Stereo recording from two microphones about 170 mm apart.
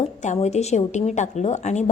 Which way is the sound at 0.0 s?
40° left (ahead or behind).